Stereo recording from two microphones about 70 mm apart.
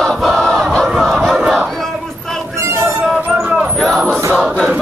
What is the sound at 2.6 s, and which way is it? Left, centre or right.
Music, right.